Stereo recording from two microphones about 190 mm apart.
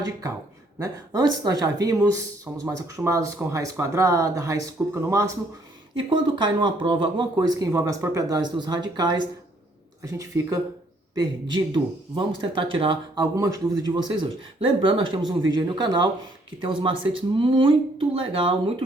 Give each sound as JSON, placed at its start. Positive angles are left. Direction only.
{"t": 0.0, "sound": "speech", "side_deg": -20}
{"t": 6.0, "sound": "speech", "side_deg": -25}